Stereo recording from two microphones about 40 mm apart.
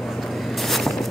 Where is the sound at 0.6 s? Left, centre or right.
Centre.